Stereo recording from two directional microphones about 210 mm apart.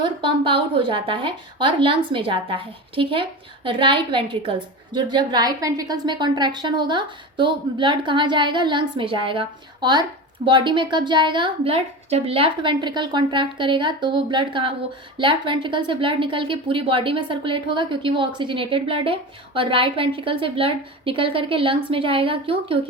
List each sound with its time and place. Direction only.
0.0 s a woman's voice: 25° right (ahead or behind)